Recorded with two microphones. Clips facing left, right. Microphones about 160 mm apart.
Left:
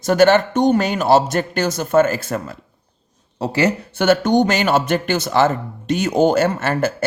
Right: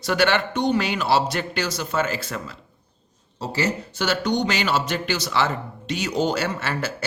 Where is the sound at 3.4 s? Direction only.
60° left (ahead or behind).